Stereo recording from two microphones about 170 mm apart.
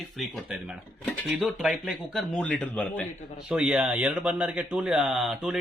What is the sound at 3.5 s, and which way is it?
Speech, 5° right (ahead or behind).